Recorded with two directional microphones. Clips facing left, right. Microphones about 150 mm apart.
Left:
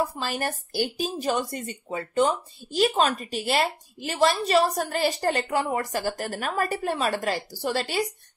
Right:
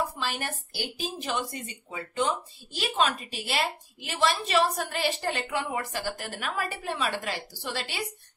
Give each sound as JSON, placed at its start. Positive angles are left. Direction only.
{"t": 0.2, "sound": "a woman's voice", "side_deg": 40}